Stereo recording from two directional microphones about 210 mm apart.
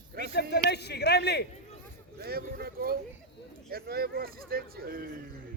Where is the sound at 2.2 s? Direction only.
45° right (ahead or behind).